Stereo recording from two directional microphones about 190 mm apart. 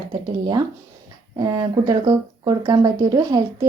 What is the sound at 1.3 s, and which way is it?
Speech, 20° right (ahead or behind).